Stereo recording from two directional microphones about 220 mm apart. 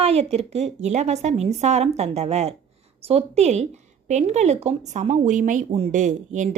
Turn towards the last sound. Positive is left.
turn(degrees=-35)  # may be behind; listen again after turning